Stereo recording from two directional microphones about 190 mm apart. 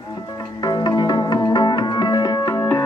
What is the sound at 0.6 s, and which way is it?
Music, 20° left (ahead or behind).